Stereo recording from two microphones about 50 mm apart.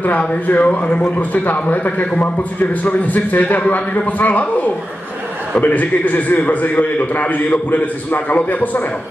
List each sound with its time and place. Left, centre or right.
0.0 s a man's voice: left